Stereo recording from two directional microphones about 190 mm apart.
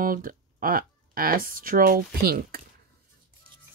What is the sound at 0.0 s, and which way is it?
Speech, 50° right (ahead or behind).